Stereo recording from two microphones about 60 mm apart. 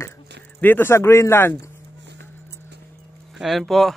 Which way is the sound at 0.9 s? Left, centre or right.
Left.